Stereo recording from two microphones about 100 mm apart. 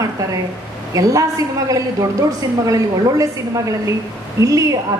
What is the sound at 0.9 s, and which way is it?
A woman's voice, 35° right (ahead or behind).